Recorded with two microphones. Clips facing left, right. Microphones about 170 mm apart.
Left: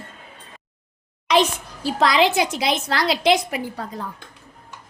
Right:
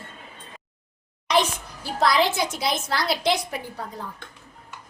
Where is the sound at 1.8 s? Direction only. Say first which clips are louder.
Left 3 dB; 90° left.